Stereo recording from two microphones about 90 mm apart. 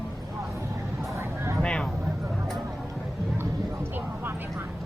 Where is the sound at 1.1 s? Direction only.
30° right (ahead or behind).